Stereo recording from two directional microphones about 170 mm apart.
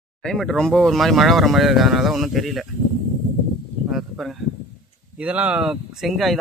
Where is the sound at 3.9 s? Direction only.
Centre (ahead or behind).